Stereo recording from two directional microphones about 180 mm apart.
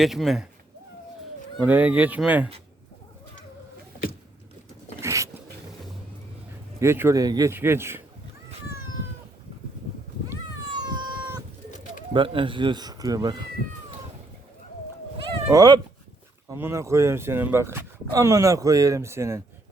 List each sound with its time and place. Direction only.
0.0 s speech: centre (ahead or behind)
1.6 s speech: 10° right (ahead or behind)
4.9 s dog: 15° right (ahead or behind)
6.7 s speech: 15° right (ahead or behind)
10.8 s cat: 25° right (ahead or behind)
12.1 s speech: 30° right (ahead or behind)
15.4 s speech: 20° right (ahead or behind)